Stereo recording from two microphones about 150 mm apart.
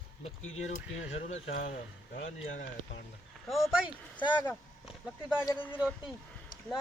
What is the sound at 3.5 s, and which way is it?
Speech, 5° right (ahead or behind).